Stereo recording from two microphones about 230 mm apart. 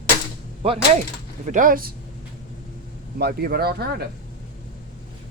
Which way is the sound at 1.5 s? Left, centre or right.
Right.